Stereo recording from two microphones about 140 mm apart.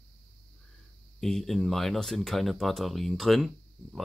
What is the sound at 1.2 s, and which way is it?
Speech, 5° left (ahead or behind).